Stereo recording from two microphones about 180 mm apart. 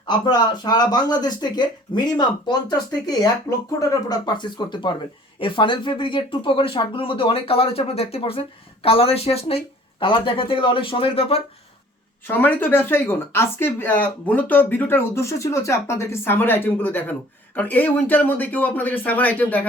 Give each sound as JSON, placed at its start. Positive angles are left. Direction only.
{"t": 0.0, "sound": "speech", "side_deg": 25}
{"t": 12.3, "sound": "speech", "side_deg": 10}